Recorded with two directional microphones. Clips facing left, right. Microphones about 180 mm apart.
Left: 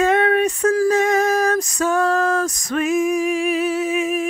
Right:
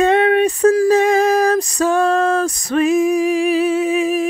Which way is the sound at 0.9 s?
30° right (ahead or behind).